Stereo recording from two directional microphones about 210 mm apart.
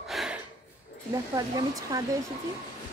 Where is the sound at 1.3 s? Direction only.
15° right (ahead or behind).